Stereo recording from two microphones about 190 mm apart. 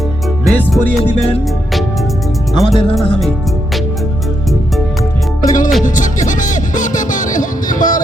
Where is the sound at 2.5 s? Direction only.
35° right (ahead or behind).